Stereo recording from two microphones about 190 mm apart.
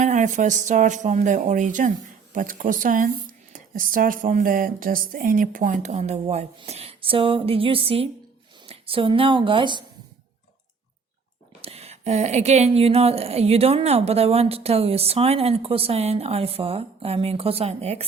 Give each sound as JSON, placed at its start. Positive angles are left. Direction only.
{"t": 0.0, "sound": "a woman's voice", "side_deg": -40}
{"t": 11.6, "sound": "speech", "side_deg": -35}